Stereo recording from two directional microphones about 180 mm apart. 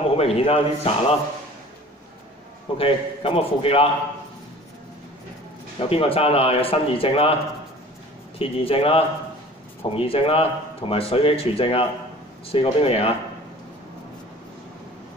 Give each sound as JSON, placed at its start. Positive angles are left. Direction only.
{"t": 0.0, "sound": "speech", "side_deg": 35}
{"t": 2.8, "sound": "speech", "side_deg": 30}
{"t": 5.8, "sound": "speech", "side_deg": 30}
{"t": 8.4, "sound": "speech", "side_deg": 30}